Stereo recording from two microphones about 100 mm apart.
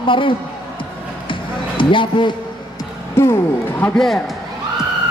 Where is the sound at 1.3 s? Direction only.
55° left (ahead or behind).